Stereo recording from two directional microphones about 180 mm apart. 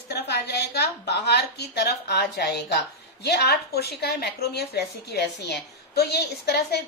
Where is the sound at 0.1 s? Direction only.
65° left (ahead or behind).